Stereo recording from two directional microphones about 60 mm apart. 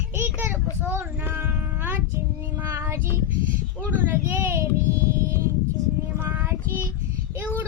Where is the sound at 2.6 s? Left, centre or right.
Right.